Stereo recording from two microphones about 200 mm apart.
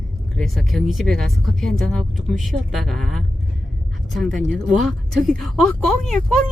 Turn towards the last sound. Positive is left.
turn(degrees=0)  # may be behind; listen again after turning